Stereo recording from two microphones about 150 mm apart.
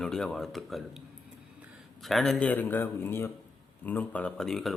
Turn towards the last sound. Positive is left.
turn(degrees=0)  # may be behind; listen again after turning